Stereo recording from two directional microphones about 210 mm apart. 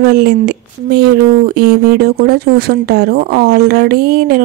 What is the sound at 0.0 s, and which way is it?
A woman's voice, 50° right (ahead or behind).